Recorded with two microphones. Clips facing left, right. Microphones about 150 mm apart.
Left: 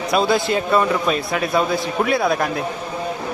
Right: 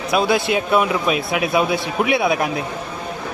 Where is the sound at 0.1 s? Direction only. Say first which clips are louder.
Even; centre (ahead or behind).